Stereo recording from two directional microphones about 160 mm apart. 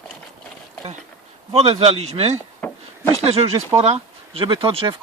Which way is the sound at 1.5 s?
40° right (ahead or behind).